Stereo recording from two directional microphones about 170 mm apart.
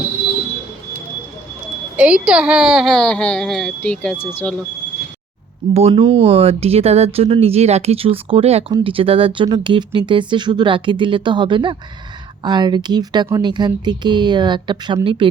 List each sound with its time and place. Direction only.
2.0 s speech: 5° right (ahead or behind); by 4.5 s 15° left (ahead or behind)
5.7 s speech: 35° right (ahead or behind)